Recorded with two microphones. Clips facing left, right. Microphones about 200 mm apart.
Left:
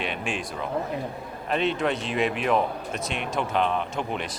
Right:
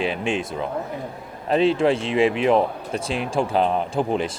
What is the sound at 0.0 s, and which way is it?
Speech, 25° right (ahead or behind).